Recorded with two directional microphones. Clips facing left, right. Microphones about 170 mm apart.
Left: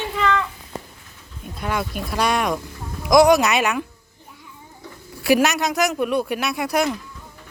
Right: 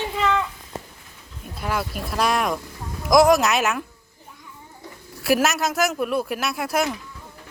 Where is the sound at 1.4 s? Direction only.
5° right (ahead or behind).